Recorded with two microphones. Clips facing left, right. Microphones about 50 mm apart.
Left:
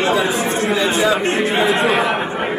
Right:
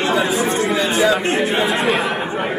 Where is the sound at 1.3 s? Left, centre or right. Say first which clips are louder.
Left 1 dB; centre.